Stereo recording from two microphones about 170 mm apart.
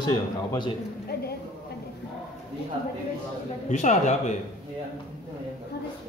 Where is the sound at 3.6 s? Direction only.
45° left (ahead or behind).